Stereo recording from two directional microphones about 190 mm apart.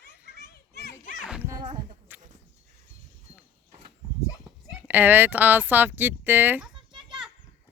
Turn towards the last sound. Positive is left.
turn(degrees=-10)  # may be behind; listen again after turning